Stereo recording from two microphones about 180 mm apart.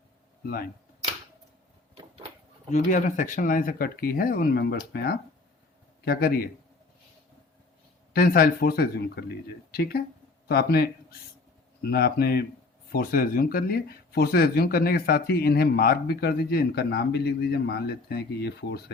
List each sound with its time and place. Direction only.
0.4 s speech: 55° left (ahead or behind)
2.6 s speech: 45° left (ahead or behind)
8.1 s speech: 55° left (ahead or behind)